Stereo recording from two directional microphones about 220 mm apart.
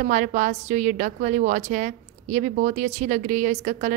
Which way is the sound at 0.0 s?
35° right (ahead or behind).